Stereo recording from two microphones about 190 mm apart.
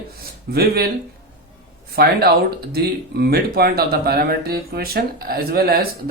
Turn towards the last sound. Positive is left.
turn(degrees=-50)  # may be behind; listen again after turning